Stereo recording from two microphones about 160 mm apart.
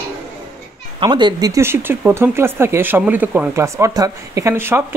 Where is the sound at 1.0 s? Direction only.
30° right (ahead or behind).